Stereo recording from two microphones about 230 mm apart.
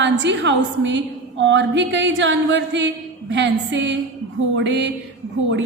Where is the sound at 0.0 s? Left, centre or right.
Right.